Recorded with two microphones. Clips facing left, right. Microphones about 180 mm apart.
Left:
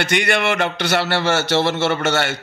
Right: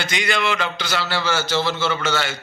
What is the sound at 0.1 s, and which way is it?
A man's voice, 60° left (ahead or behind).